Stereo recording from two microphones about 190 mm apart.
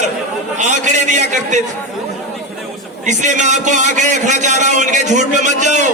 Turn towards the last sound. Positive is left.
turn(degrees=-40)  # may be behind; listen again after turning